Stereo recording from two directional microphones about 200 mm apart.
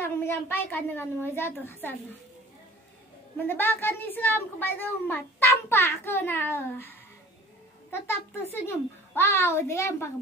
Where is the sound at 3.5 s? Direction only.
10° left (ahead or behind).